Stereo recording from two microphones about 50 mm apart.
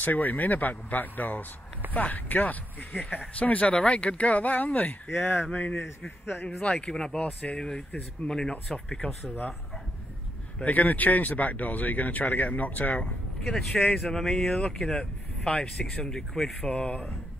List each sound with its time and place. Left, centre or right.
0.0 s speech: left
5.0 s speech: left
6.4 s speech: left
6.9 s speech: centre
7.2 s speech: left
8.3 s speech: centre
10.6 s speech: left
14.0 s speech: centre
16.6 s speech: left